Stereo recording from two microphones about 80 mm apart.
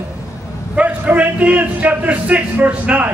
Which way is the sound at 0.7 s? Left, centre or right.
Centre.